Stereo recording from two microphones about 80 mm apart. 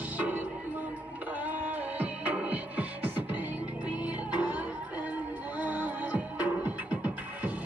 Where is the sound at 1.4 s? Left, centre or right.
Right.